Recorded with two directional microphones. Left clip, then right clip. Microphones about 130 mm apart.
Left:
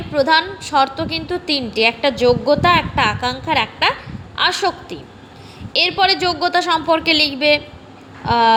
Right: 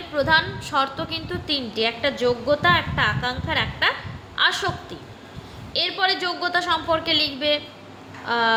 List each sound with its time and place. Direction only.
0.1 s a woman's voice: 50° left (ahead or behind)
5.7 s a woman's voice: 60° left (ahead or behind)